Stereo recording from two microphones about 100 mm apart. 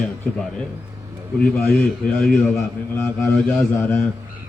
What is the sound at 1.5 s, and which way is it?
Speech, 20° left (ahead or behind).